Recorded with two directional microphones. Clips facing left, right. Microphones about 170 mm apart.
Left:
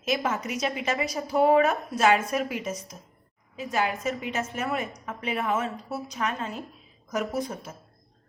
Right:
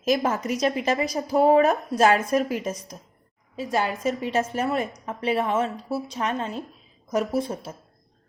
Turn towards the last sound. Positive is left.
turn(degrees=-30)  # may be behind; listen again after turning